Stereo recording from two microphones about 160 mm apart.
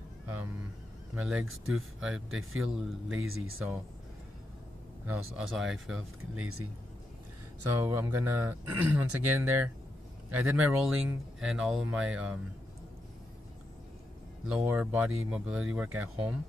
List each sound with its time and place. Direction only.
1.1 s speech: 5° right (ahead or behind)
5.0 s speech: 5° right (ahead or behind)
7.6 s speech: 20° right (ahead or behind)
14.5 s speech: 5° right (ahead or behind)